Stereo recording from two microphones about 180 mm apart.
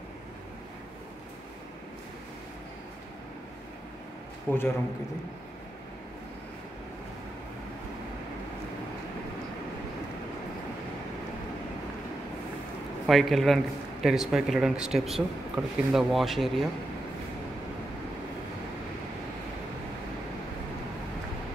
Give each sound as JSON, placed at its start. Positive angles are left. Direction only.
{"t": 4.5, "sound": "a man's voice", "side_deg": 10}
{"t": 13.0, "sound": "speech", "side_deg": 0}